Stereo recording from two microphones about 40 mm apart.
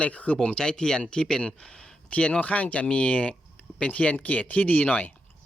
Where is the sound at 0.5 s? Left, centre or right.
Centre.